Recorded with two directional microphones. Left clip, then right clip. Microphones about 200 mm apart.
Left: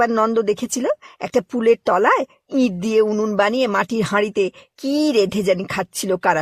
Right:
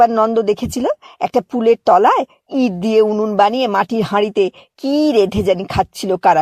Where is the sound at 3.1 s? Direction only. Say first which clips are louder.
Right 4 dB; 20° left (ahead or behind).